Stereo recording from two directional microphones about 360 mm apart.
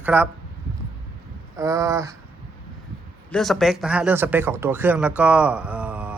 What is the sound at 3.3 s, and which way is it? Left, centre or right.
Speech, centre.